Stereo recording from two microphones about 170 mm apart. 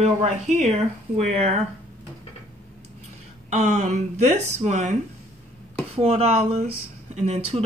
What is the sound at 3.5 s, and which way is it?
Speech, 45° right (ahead or behind).